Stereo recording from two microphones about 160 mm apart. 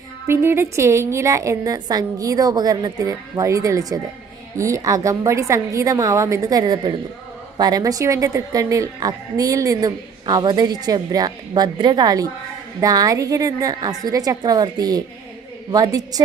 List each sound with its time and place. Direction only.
0.3 s speech: 15° right (ahead or behind)